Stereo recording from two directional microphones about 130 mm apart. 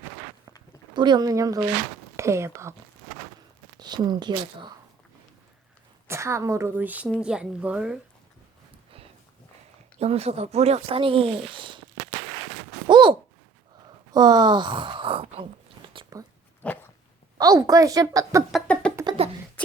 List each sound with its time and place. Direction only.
0.9 s a woman's voice: 35° right (ahead or behind)
3.8 s a woman's voice: 35° right (ahead or behind)
6.1 s a woman's voice: 20° right (ahead or behind)
10.0 s speech: 55° right (ahead or behind)
12.9 s a sound: 40° right (ahead or behind)
14.1 s speech: 30° right (ahead or behind)
16.1 s dog: 30° right (ahead or behind)
16.6 s dog: 10° left (ahead or behind)
17.3 s a woman's voice: 25° right (ahead or behind)
18.7 s a sound: 10° left (ahead or behind)
19.0 s a sound: 45° right (ahead or behind)